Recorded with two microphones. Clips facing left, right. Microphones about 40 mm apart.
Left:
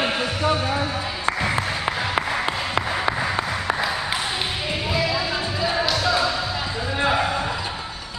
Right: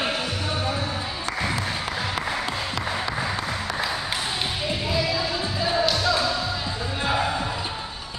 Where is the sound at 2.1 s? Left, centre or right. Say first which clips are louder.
Left 4 dB; left.